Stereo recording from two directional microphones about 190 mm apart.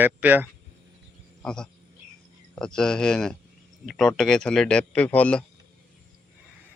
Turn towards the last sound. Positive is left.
turn(degrees=5)  # may be behind; listen again after turning